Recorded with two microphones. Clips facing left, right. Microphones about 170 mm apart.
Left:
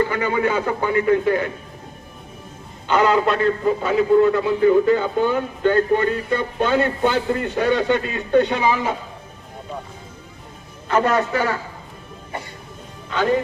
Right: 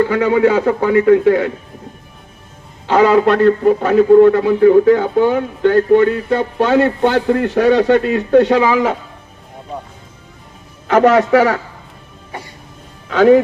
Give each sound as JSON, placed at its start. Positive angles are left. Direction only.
{"t": 0.1, "sound": "a man's voice", "side_deg": -80}
{"t": 2.8, "sound": "speech", "side_deg": -85}
{"t": 10.8, "sound": "speech", "side_deg": -85}
{"t": 13.1, "sound": "speech", "side_deg": -75}